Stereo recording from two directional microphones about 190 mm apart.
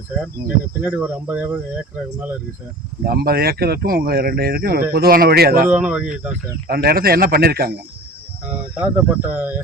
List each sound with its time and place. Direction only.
0.8 s speech: 10° right (ahead or behind)
3.0 s speech: 55° right (ahead or behind)
5.6 s speech: 5° right (ahead or behind)
6.7 s speech: 55° right (ahead or behind)
8.4 s speech: 10° right (ahead or behind)